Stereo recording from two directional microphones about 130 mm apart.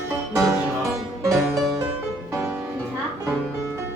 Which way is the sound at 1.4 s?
Centre (ahead or behind).